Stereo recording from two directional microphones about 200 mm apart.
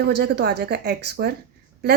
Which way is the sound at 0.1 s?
55° right (ahead or behind).